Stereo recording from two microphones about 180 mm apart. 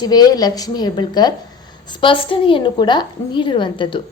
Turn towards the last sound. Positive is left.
turn(degrees=25)  # may be behind; listen again after turning